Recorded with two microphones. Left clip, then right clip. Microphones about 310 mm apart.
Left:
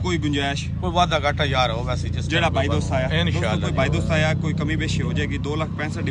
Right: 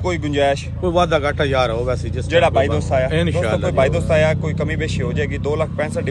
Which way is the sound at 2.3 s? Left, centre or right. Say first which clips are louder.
Right 7 dB; centre.